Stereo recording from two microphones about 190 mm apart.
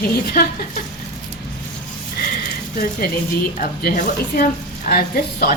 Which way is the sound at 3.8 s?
50° left (ahead or behind).